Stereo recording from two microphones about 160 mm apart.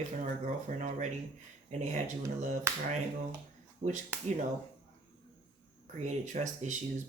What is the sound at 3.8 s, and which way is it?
Speech, 80° right.